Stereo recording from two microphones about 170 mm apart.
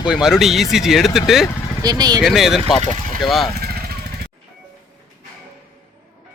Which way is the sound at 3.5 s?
65° right (ahead or behind).